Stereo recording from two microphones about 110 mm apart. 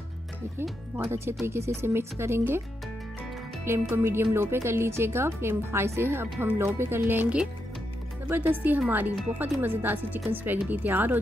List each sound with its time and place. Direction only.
0.6 s speech: 20° right (ahead or behind)
3.9 s speech: 20° right (ahead or behind)